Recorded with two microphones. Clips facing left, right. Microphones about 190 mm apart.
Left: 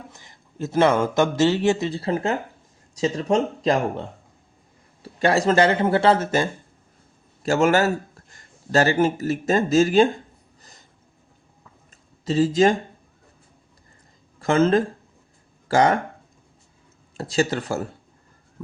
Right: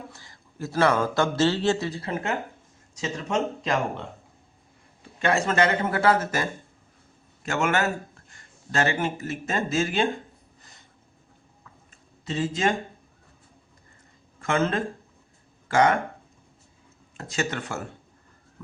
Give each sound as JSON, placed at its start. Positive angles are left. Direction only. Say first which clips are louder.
{"t": 0.1, "sound": "speech", "louder": "left 1 dB", "side_deg": 20}
{"t": 1.9, "sound": "speech", "louder": "left 5 dB", "side_deg": 30}
{"t": 5.2, "sound": "a man's voice", "louder": "left 5 dB", "side_deg": 35}
{"t": 10.6, "sound": "a sound", "louder": "left 3 dB", "side_deg": 40}
{"t": 12.2, "sound": "speech", "louder": "left 8 dB", "side_deg": 35}
{"t": 14.4, "sound": "speech", "louder": "left 7 dB", "side_deg": 35}
{"t": 17.2, "sound": "speech", "louder": "left 7 dB", "side_deg": 35}